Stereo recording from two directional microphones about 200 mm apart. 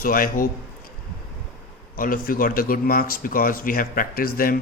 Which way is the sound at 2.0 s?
45° left (ahead or behind).